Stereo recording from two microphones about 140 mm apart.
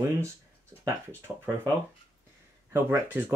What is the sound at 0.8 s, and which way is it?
Speech, 20° right (ahead or behind).